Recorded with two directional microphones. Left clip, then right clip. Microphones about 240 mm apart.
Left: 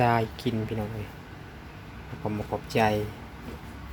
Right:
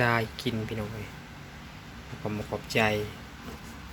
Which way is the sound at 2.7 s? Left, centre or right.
Centre.